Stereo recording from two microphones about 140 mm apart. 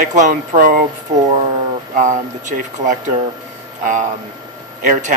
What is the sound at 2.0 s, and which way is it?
Speech, 65° right (ahead or behind).